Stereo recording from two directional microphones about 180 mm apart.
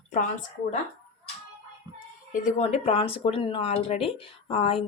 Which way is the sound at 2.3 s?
40° left (ahead or behind).